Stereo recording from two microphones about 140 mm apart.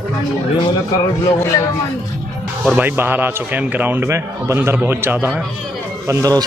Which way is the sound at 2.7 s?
15° right (ahead or behind).